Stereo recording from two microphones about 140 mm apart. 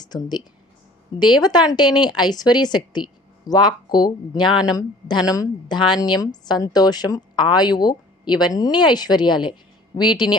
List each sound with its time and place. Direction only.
0.0 s speech: 30° left (ahead or behind)